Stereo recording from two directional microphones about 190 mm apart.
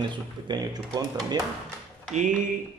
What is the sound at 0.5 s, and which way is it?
Speech, 20° right (ahead or behind).